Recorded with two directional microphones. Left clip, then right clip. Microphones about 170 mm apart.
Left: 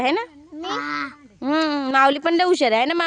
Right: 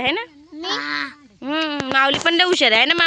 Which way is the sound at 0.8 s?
5° right (ahead or behind).